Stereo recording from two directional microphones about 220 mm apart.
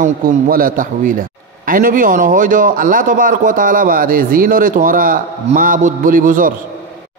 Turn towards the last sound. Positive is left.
turn(degrees=-40)  # may be behind; listen again after turning